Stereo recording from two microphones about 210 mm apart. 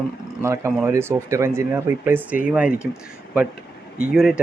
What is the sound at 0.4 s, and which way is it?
A man's voice, 15° right (ahead or behind).